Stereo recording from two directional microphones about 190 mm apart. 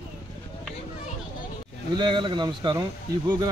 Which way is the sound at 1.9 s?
25° right (ahead or behind).